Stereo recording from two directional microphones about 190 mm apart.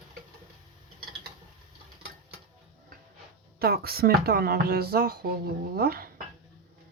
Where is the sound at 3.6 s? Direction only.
55° right (ahead or behind).